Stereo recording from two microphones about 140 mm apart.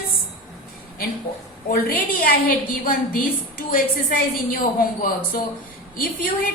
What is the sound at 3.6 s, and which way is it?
A woman's voice, 90° left.